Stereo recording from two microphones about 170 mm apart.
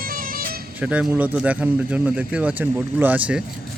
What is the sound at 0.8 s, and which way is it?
Speech, 10° right (ahead or behind).